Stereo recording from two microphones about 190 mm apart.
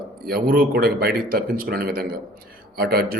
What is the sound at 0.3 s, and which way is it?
A man's voice, 55° right (ahead or behind).